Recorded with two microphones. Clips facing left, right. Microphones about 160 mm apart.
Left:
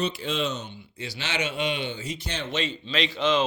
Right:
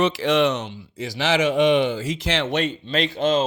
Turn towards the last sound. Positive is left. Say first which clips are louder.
# right 4 dB
turn(degrees=-50)  # may be behind; listen again after turning